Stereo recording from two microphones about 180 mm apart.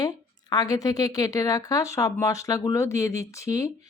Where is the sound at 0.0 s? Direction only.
20° left (ahead or behind).